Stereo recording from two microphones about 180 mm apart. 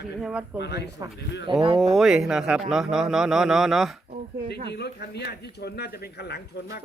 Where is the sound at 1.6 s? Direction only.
30° right (ahead or behind).